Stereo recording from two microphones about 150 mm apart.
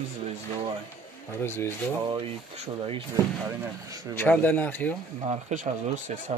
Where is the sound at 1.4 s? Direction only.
15° left (ahead or behind).